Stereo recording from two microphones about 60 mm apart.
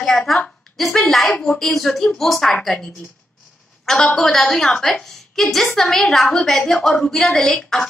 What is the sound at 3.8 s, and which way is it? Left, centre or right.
A woman's voice, centre.